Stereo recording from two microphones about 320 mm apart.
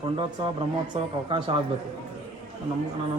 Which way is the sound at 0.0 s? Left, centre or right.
Centre.